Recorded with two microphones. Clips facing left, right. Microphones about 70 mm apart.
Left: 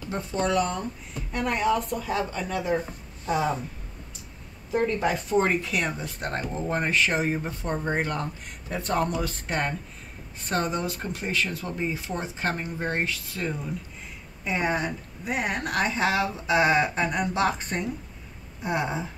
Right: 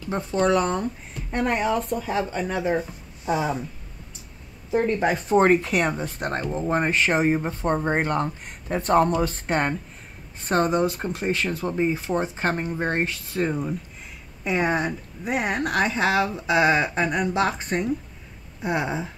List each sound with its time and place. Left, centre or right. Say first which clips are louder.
0.1 s speech: right 5 dB; right
2.8 s speech: right 2 dB; centre
4.7 s speech: right 3 dB; right
14.4 s speech: right 3 dB; right
16.3 s speech: right 2 dB; centre
18.6 s speech: right 2 dB; centre